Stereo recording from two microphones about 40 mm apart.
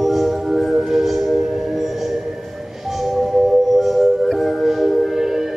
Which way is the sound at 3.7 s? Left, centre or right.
Centre.